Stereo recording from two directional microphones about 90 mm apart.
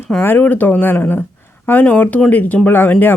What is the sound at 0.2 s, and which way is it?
Speech, 20° left (ahead or behind).